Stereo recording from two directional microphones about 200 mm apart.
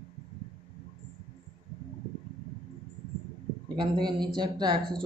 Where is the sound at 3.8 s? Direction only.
20° right (ahead or behind).